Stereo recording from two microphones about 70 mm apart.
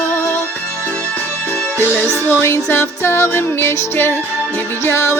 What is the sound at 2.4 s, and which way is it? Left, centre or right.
Music, left.